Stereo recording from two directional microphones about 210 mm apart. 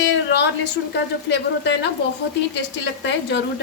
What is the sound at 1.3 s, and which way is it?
Speech, 55° left (ahead or behind).